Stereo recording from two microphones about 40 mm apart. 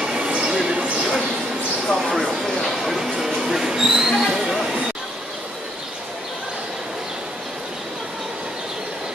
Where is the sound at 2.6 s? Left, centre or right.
Centre.